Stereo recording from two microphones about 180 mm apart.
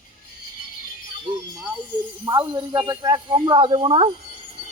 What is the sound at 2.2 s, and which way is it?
Speech, 20° right (ahead or behind).